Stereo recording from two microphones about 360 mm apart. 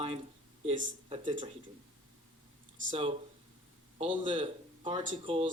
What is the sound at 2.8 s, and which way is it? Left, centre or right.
Speech, centre.